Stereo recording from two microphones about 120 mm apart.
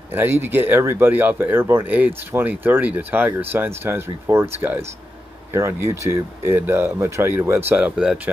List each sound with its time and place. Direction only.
0.1 s speech: 15° right (ahead or behind)